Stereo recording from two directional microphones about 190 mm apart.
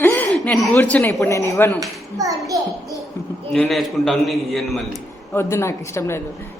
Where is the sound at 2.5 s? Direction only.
20° right (ahead or behind).